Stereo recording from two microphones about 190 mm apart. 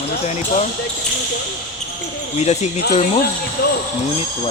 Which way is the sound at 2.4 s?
35° left (ahead or behind).